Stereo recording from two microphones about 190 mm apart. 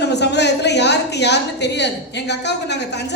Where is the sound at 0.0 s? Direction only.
65° left (ahead or behind).